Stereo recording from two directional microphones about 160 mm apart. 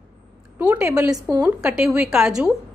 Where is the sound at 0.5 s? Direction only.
10° right (ahead or behind).